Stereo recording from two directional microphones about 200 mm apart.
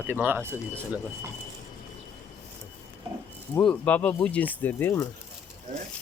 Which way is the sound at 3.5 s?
5° left (ahead or behind).